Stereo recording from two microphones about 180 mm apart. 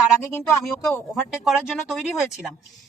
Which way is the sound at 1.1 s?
Centre (ahead or behind).